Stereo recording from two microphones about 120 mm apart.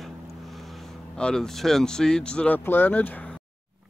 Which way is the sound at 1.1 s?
5° left (ahead or behind).